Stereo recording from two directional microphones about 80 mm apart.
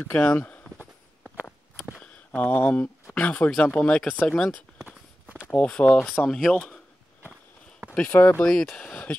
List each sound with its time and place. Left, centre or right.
0.0 s speech: centre
1.2 s walk: centre
2.0 s a sound: centre
2.5 s speech: left; by 6.7 s centre
7.9 s speech: left
8.5 s speech: centre